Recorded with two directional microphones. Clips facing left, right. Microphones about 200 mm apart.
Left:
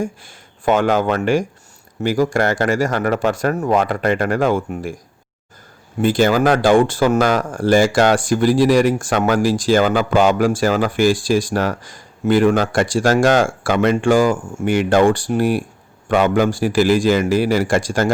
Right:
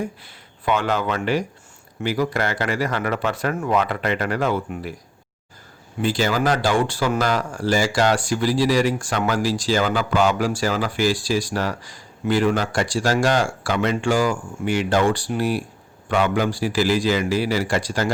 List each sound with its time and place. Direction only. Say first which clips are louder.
0.0 s speech: left 4 dB; 45° left (ahead or behind)
6.0 s speech: left 6 dB; 50° left (ahead or behind)